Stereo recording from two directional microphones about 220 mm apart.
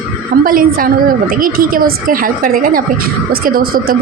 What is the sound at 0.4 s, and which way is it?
A woman's voice, 40° right (ahead or behind).